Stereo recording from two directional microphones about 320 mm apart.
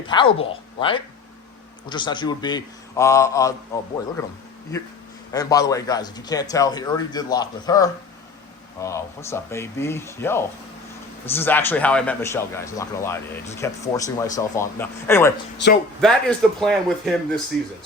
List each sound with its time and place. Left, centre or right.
0.1 s a man's voice: centre
5.3 s a man's voice: centre
15.6 s speech: left
16.0 s a man's voice: centre